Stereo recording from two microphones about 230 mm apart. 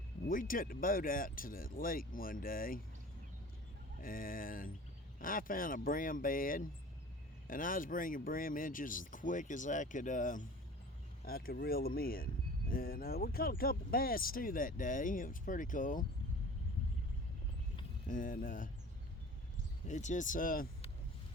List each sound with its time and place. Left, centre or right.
0.3 s speech: left
4.0 s speech: left
18.1 s speech: left
19.9 s speech: left